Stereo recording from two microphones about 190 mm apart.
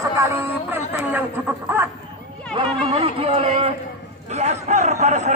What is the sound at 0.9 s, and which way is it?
Speech, 10° right (ahead or behind).